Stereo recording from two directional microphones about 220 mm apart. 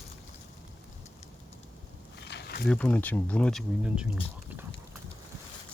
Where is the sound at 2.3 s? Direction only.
50° left (ahead or behind).